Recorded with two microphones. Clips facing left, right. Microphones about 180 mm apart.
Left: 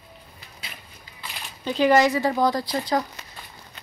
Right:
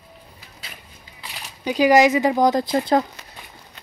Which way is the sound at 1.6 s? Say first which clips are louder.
Right 3 dB; 10° right (ahead or behind).